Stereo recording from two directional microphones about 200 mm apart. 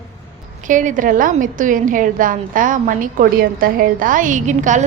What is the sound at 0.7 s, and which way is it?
A woman's voice, 40° right (ahead or behind).